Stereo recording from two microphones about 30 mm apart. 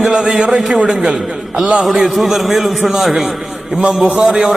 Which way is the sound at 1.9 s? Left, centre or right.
Centre.